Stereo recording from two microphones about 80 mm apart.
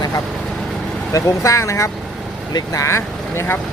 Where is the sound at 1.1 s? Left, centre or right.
Left.